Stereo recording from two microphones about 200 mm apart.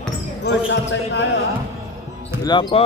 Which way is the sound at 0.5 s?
55° left (ahead or behind).